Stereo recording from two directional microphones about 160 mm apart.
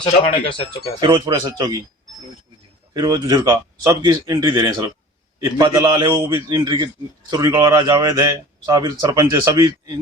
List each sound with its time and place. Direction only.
0.0 s speech: 30° left (ahead or behind)
0.9 s a man's voice: 25° right (ahead or behind)
2.9 s a man's voice: 25° right (ahead or behind)